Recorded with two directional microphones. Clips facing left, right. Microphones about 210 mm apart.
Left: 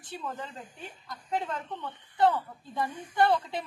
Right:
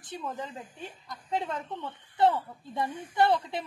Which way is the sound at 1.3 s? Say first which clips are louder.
Right 1 dB; 25° right (ahead or behind).